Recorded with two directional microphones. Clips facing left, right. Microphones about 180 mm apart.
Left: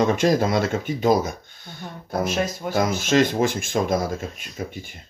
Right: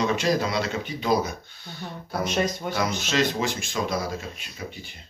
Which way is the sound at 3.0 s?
50° left (ahead or behind).